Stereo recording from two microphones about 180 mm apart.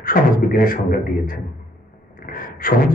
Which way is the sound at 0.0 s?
50° left (ahead or behind).